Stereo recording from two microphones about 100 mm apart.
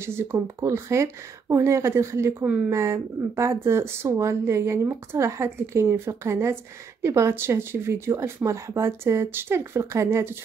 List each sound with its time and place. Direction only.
0.0 s speech: 25° right (ahead or behind)